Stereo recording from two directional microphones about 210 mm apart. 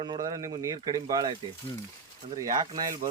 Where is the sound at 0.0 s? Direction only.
20° right (ahead or behind).